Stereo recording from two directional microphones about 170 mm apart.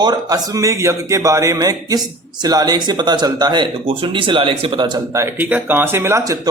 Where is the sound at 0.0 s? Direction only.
25° right (ahead or behind).